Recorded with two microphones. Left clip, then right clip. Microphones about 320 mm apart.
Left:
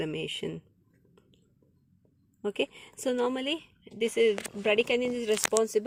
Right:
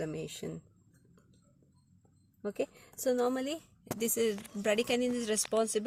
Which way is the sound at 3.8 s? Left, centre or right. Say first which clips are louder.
Left 6 dB; centre.